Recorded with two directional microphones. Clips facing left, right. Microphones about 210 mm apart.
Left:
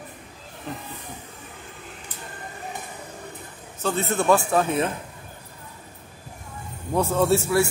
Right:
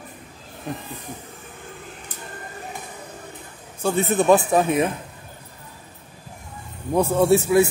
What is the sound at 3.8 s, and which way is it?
Speech, 15° right (ahead or behind).